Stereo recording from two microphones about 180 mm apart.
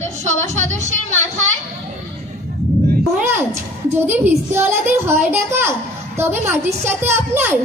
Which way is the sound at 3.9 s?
10° right (ahead or behind).